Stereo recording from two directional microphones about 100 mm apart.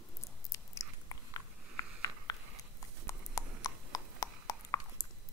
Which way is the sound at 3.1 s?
35° left (ahead or behind).